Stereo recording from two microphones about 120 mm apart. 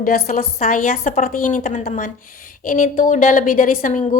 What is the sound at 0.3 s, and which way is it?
A woman's voice, 90° left.